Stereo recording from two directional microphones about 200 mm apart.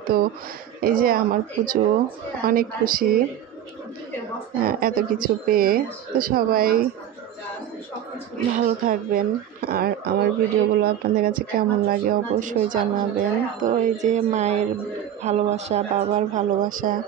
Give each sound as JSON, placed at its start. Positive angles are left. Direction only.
{"t": 0.0, "sound": "speech", "side_deg": -45}
{"t": 4.6, "sound": "speech", "side_deg": -45}
{"t": 8.5, "sound": "speech", "side_deg": -45}